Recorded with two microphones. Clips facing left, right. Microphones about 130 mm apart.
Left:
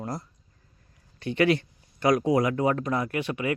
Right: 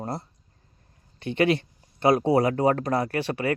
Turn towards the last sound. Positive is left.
turn(degrees=-35)  # may be behind; listen again after turning